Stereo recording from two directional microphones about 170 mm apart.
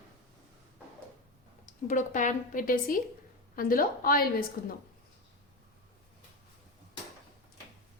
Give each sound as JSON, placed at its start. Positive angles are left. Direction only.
{"t": 1.6, "sound": "a woman's voice", "side_deg": 50}